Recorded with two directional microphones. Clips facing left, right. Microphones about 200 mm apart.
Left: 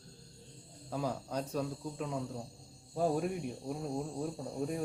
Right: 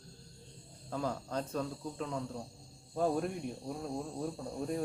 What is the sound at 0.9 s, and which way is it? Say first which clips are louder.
Speech: even; 10° left (ahead or behind).